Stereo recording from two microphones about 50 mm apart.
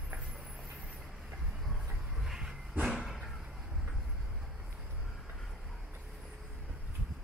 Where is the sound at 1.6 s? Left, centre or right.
Centre.